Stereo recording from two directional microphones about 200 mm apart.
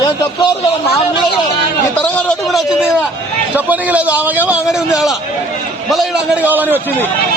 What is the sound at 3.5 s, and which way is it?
A man's voice, 10° right (ahead or behind).